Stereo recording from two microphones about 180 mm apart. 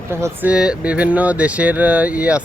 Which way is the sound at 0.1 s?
10° right (ahead or behind).